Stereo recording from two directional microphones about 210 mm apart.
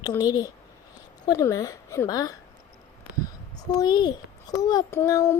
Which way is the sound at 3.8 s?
20° left (ahead or behind).